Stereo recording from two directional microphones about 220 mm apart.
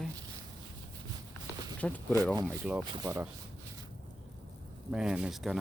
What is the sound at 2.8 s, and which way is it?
Speech, 15° right (ahead or behind).